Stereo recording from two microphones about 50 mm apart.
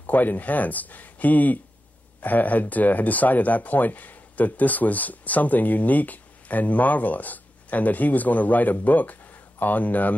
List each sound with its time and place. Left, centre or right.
0.0 s speech: left